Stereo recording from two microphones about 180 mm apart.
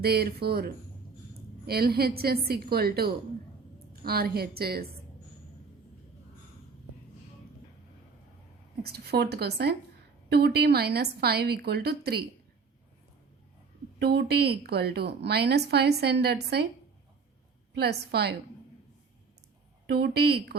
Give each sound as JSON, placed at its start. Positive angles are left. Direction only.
{"t": 0.0, "sound": "a woman's voice", "side_deg": -60}
{"t": 8.8, "sound": "a woman's voice", "side_deg": -65}
{"t": 14.0, "sound": "a woman's voice", "side_deg": -65}
{"t": 17.7, "sound": "a woman's voice", "side_deg": -65}
{"t": 19.9, "sound": "a woman's voice", "side_deg": -60}